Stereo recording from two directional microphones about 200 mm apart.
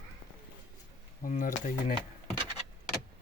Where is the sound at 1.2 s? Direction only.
40° left (ahead or behind).